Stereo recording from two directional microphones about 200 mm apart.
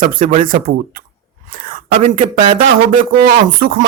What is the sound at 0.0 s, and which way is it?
Speech, 45° right (ahead or behind).